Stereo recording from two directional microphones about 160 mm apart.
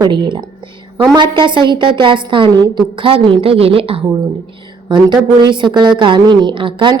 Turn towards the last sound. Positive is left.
turn(degrees=-30)  # may be behind; listen again after turning